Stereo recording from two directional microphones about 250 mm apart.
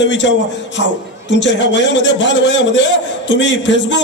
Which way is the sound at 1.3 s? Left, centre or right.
Left.